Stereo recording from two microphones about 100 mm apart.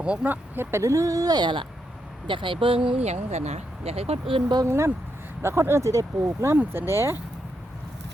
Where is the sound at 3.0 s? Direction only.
90° right; by 4.4 s 65° right (ahead or behind).